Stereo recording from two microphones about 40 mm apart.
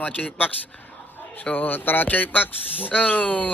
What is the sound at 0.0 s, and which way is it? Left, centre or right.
Speech, left.